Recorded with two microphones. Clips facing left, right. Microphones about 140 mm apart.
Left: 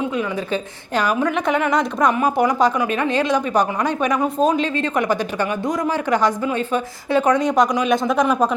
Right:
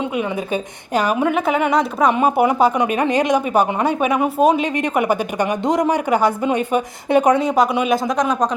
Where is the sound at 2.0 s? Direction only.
25° right (ahead or behind).